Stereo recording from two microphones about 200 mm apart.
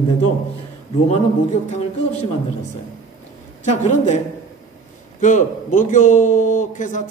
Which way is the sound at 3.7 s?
35° left (ahead or behind).